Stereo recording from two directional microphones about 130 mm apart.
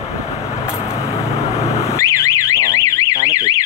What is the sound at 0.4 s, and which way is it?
Vehicle, 20° left (ahead or behind).